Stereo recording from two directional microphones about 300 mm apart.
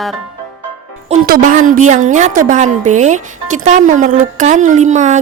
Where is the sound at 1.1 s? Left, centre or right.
Right.